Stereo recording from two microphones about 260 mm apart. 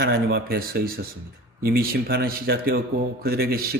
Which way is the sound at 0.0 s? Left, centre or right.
Right.